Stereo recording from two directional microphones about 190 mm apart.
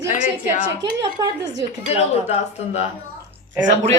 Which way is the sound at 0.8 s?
70° right (ahead or behind).